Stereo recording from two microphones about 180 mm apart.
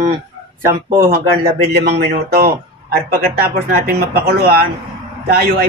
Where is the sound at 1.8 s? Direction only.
65° right (ahead or behind).